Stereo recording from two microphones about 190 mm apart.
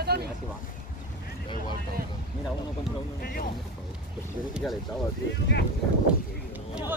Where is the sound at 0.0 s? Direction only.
55° right (ahead or behind).